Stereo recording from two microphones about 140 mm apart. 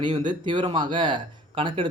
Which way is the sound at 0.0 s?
35° right (ahead or behind).